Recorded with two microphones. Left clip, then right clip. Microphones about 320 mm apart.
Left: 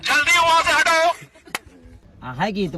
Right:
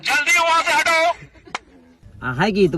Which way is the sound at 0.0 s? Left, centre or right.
Centre.